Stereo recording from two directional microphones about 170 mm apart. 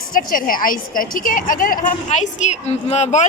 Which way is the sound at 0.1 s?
55° left (ahead or behind).